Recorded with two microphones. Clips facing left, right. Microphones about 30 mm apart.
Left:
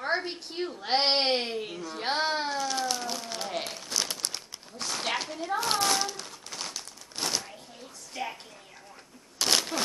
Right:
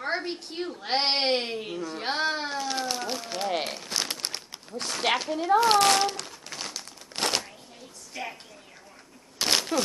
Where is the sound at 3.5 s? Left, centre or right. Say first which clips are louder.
Right 5 dB; right.